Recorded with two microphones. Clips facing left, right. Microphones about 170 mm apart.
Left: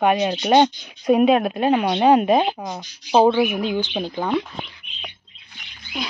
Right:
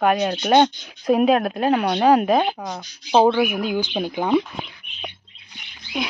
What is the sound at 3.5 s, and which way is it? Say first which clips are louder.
Speech: even; 10° right (ahead or behind).